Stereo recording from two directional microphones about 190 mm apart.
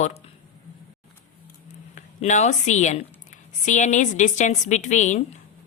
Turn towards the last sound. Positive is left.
turn(degrees=40)  # may be behind; listen again after turning